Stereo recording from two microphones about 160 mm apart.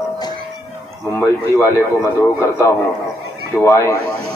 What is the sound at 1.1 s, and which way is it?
A man's voice, 15° left (ahead or behind).